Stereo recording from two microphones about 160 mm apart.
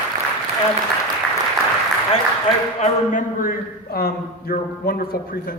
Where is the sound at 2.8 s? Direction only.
50° left (ahead or behind).